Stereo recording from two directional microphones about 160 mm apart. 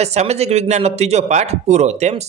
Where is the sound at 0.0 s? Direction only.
40° right (ahead or behind).